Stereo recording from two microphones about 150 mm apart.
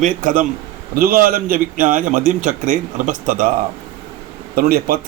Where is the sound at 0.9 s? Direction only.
75° right (ahead or behind).